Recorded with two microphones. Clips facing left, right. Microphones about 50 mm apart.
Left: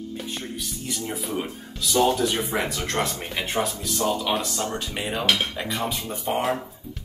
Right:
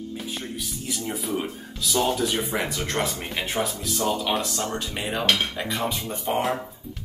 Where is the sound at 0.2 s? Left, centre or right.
Centre.